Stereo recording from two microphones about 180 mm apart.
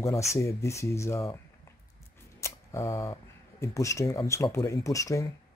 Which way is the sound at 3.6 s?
15° left (ahead or behind).